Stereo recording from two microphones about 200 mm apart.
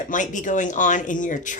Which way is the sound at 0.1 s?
40° left (ahead or behind).